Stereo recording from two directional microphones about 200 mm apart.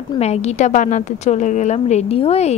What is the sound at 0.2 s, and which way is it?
A woman's voice, 35° left (ahead or behind).